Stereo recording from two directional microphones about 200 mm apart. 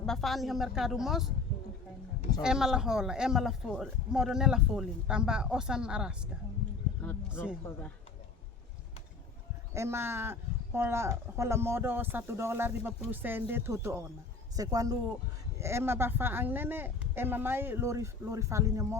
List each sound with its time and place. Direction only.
0.0 s speech: centre (ahead or behind)
2.4 s speech: 5° right (ahead or behind)
7.0 s speech: 10° left (ahead or behind)
9.7 s speech: 15° right (ahead or behind)